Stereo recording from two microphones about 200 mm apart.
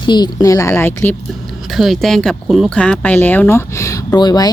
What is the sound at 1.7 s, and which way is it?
Speech, centre (ahead or behind).